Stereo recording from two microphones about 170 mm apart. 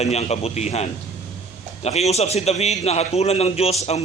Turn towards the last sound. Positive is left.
turn(degrees=40)  # may be behind; listen again after turning